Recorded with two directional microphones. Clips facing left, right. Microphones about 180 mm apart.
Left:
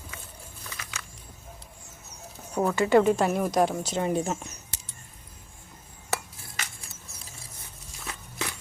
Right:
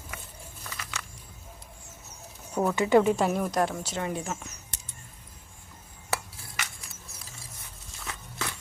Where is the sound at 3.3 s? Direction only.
10° left (ahead or behind); by 4.5 s 30° left (ahead or behind).